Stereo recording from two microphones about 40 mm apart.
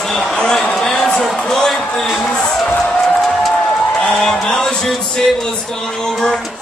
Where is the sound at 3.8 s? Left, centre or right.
Centre.